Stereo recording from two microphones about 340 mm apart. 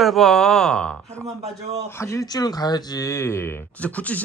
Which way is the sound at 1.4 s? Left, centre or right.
Centre.